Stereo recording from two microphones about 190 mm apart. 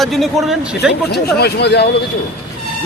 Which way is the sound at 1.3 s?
60° left (ahead or behind).